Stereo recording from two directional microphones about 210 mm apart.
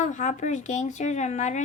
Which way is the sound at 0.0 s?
35° left (ahead or behind).